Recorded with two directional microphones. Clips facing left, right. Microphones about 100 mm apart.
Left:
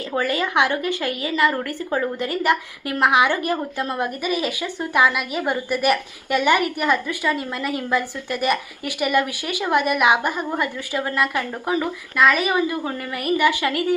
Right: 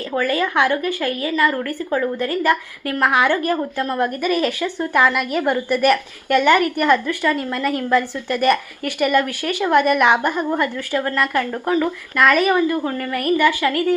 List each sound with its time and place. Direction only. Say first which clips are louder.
0.2 s a woman's voice: right 2 dB; 20° left (ahead or behind)